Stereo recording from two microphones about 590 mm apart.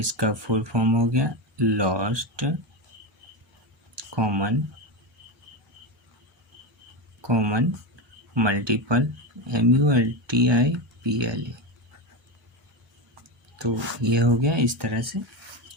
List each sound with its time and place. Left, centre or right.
0.0 s speech: right
4.1 s speech: right
7.2 s speech: right
13.6 s speech: right